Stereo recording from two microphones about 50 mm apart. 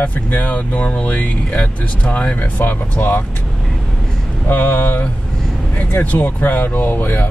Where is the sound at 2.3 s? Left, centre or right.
Left.